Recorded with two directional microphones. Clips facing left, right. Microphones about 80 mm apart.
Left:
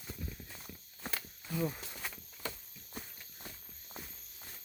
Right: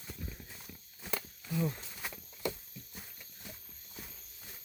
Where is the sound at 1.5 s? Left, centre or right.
Centre.